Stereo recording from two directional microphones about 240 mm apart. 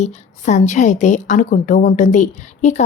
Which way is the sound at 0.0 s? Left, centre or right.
Left.